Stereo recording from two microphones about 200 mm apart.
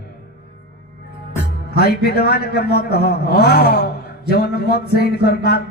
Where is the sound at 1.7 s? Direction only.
50° left (ahead or behind).